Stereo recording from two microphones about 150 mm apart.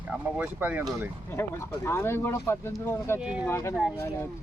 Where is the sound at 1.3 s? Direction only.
15° left (ahead or behind).